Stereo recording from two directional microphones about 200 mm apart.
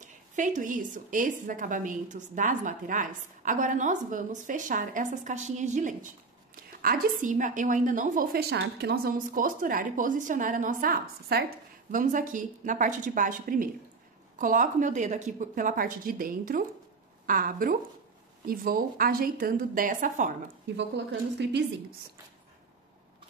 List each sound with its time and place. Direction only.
0.0 s a woman's voice: 40° right (ahead or behind)
20.7 s a woman's voice: 60° right (ahead or behind)